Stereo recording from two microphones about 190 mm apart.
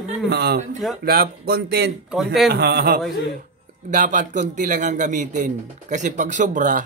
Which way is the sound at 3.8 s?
45° right (ahead or behind).